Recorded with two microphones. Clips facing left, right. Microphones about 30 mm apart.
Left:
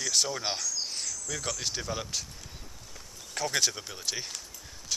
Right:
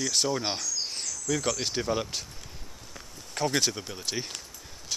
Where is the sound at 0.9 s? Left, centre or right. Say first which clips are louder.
Right 5 dB; centre.